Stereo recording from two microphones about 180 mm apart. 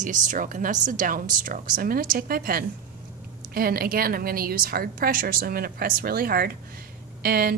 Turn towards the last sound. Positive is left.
turn(degrees=-55)  # may be behind; listen again after turning